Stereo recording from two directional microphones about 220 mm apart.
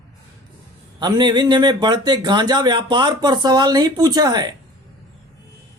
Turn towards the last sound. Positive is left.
turn(degrees=-20)  # may be behind; listen again after turning